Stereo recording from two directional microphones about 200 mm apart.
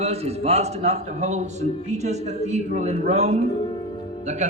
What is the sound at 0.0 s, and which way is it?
A man's voice, 30° right (ahead or behind).